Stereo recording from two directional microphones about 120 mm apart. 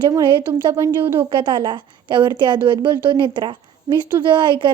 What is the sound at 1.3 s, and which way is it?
A woman's voice, 40° right (ahead or behind).